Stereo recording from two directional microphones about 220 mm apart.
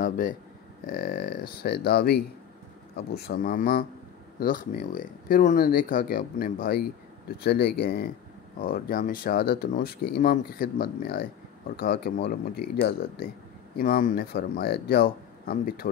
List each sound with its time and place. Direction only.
0.0 s speech: 35° left (ahead or behind)
13.7 s speech: 40° left (ahead or behind)